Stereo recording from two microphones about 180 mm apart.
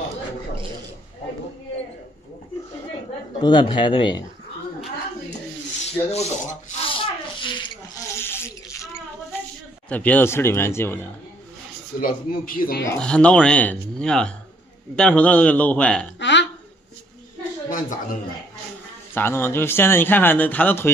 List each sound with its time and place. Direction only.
3.4 s a man's voice: 25° left (ahead or behind)
5.9 s rub: 35° left (ahead or behind)
8.2 s a sound: 15° left (ahead or behind)
9.8 s a man's voice: 10° left (ahead or behind)
12.0 s a man's voice: 55° left (ahead or behind)
13.0 s a man's voice: 5° left (ahead or behind)
16.2 s burping: 80° left
17.6 s speech: 45° left (ahead or behind)
19.1 s a man's voice: 10° left (ahead or behind)